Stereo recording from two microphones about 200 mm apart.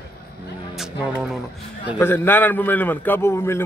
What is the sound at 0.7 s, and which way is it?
Music, centre (ahead or behind).